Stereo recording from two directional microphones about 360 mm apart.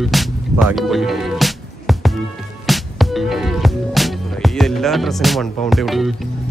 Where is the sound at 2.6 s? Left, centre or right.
Centre.